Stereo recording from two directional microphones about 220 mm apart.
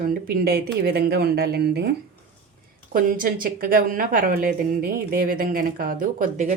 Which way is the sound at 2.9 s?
40° right (ahead or behind).